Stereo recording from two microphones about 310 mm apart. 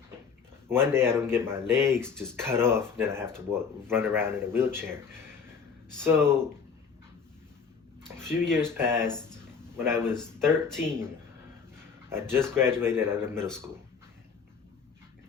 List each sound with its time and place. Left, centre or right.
0.7 s speech: centre
6.0 s speech: centre
8.2 s speech: centre